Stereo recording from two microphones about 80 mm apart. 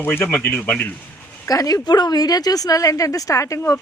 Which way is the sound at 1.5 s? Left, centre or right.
Left.